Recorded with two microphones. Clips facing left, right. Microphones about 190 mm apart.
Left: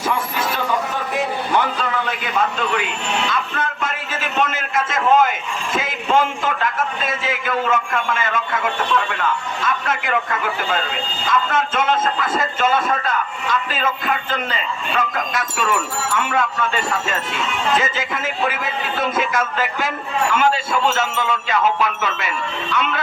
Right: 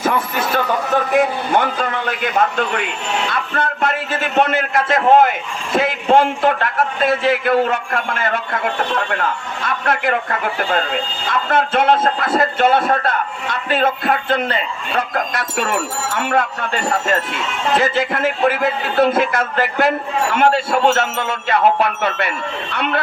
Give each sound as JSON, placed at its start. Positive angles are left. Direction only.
{"t": 0.0, "sound": "a sound", "side_deg": -50}
{"t": 1.2, "sound": "a man's voice", "side_deg": -50}
{"t": 3.5, "sound": "a man's voice", "side_deg": -65}
{"t": 11.5, "sound": "a man's voice", "side_deg": -65}